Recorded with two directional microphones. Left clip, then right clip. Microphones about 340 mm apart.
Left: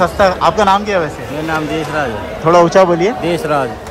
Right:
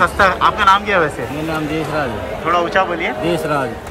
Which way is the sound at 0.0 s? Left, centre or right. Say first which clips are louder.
Left 2 dB; centre.